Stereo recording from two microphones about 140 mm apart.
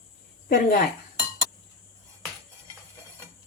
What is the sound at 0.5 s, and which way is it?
Speech, 90° left.